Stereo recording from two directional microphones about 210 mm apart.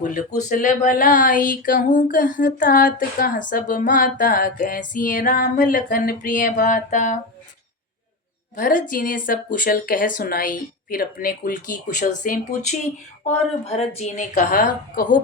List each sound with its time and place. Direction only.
0.0 s speech: 40° left (ahead or behind)
8.5 s speech: 40° left (ahead or behind)